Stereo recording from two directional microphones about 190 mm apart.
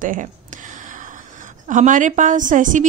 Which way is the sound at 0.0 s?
45° right (ahead or behind).